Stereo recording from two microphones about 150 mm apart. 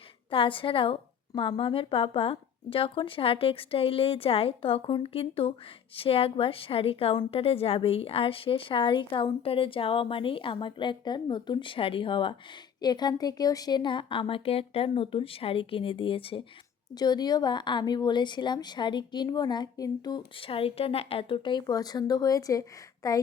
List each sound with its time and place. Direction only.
0.3 s a woman's voice: 35° left (ahead or behind)